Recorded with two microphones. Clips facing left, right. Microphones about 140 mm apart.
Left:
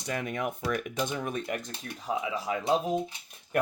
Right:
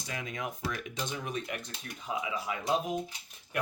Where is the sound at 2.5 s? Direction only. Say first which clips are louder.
Left 5 dB; 35° left (ahead or behind).